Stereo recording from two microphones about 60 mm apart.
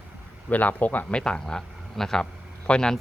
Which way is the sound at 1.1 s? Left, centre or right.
Centre.